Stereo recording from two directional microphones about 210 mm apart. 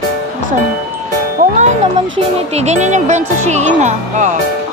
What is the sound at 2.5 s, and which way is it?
Speech, 30° right (ahead or behind).